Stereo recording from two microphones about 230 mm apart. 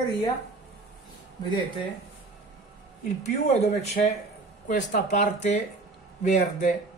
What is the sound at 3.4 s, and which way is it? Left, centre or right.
Speech, left.